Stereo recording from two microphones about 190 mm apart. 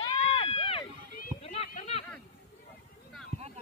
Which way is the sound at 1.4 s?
35° left (ahead or behind).